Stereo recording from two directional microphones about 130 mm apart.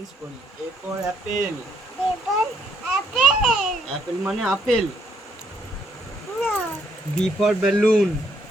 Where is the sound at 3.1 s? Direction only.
5° right (ahead or behind).